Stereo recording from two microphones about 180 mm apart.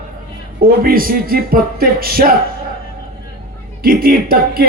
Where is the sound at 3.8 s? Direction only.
55° right (ahead or behind).